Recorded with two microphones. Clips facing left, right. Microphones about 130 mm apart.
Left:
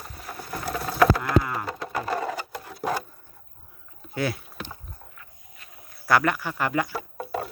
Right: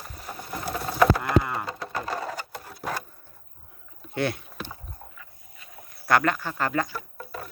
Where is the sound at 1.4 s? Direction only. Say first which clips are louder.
Even; centre (ahead or behind).